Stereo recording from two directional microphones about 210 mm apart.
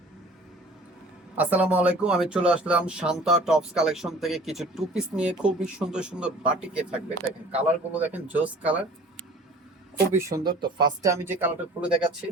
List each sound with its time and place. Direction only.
1.4 s speech: 5° right (ahead or behind)
10.2 s speech: 15° right (ahead or behind)